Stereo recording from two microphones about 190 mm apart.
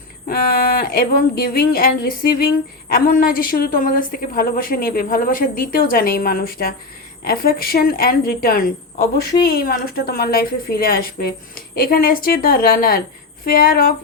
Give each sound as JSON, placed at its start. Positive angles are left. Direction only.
{"t": 0.3, "sound": "a woman's voice", "side_deg": 50}